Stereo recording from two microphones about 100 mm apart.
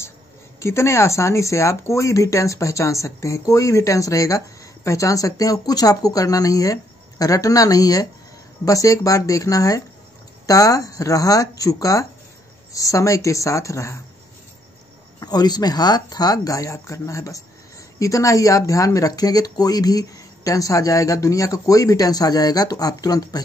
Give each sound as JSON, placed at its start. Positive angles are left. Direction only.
{"t": 0.6, "sound": "speech", "side_deg": 30}
{"t": 15.1, "sound": "speech", "side_deg": 40}